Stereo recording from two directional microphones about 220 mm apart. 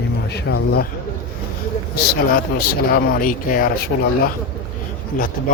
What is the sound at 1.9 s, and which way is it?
A man's voice, 45° left (ahead or behind).